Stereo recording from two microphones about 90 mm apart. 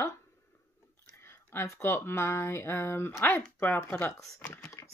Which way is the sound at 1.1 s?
25° left (ahead or behind).